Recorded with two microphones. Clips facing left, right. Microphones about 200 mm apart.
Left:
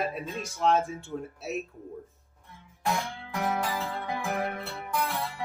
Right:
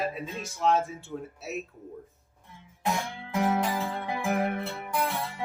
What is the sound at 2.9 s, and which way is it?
Guitar, 15° right (ahead or behind).